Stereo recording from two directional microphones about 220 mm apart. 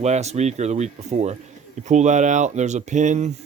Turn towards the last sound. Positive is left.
turn(degrees=-35)  # may be behind; listen again after turning